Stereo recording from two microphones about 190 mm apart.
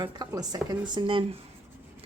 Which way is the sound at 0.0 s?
20° right (ahead or behind).